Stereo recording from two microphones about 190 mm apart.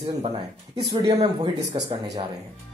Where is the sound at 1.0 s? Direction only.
20° right (ahead or behind).